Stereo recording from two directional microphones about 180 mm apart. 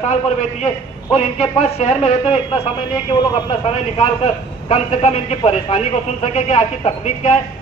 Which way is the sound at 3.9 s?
35° left (ahead or behind).